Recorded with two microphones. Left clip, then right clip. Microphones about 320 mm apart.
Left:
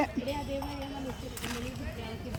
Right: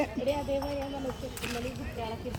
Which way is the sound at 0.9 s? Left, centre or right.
Centre.